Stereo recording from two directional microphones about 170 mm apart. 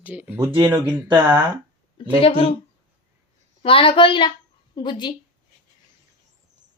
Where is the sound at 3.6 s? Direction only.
30° left (ahead or behind).